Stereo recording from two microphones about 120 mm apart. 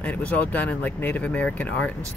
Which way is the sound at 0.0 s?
10° left (ahead or behind).